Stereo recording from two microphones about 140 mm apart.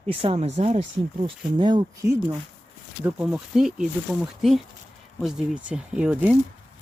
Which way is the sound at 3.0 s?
10° right (ahead or behind).